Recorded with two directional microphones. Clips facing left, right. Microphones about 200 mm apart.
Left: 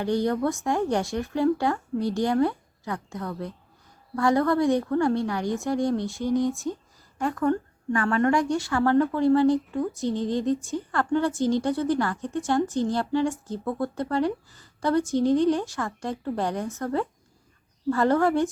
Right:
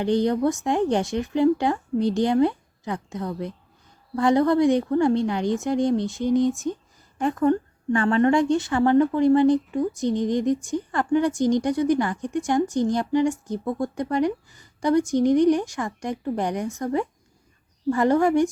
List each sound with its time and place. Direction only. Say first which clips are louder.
0.0 s a woman's voice: right 3 dB; 20° right (ahead or behind)